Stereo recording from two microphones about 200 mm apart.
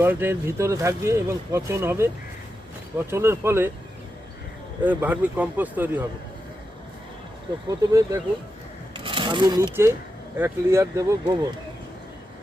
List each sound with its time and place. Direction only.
0.0 s speech: 10° right (ahead or behind)
3.1 s speech: 15° right (ahead or behind)
4.8 s speech: 10° right (ahead or behind)
7.7 s speech: 15° right (ahead or behind)